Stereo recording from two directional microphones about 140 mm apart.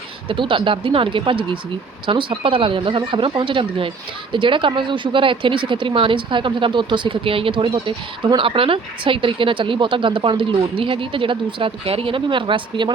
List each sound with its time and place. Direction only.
0.3 s speech: 40° right (ahead or behind)